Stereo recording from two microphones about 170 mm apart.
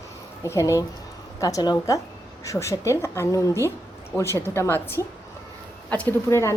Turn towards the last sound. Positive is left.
turn(degrees=15)  # may be behind; listen again after turning